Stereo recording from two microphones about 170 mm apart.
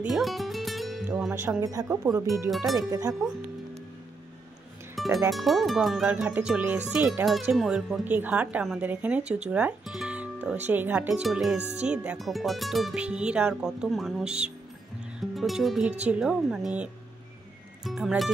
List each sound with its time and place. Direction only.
0.0 s music: centre (ahead or behind)
1.6 s speech: 20° right (ahead or behind)
2.5 s speech: centre (ahead or behind)
2.9 s speech: 20° right (ahead or behind)
4.9 s music: centre (ahead or behind)
5.3 s speech: centre (ahead or behind)
11.6 s music: 40° right (ahead or behind)
11.9 s speech: 5° right (ahead or behind)
15.1 s music: centre (ahead or behind)
16.0 s speech: 5° right (ahead or behind)